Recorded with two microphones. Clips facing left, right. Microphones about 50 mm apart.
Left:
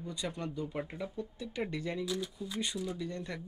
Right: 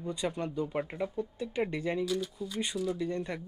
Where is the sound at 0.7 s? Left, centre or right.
Right.